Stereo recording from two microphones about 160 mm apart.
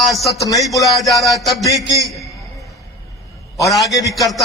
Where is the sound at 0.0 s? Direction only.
Centre (ahead or behind).